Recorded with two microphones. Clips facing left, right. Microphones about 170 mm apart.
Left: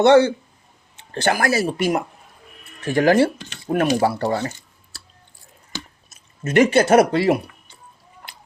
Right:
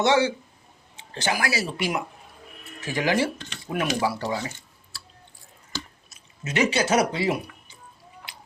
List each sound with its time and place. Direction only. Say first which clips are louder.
0.0 s speech: left 8 dB; 55° left (ahead or behind)
6.1 s speech: left 7 dB; 50° left (ahead or behind)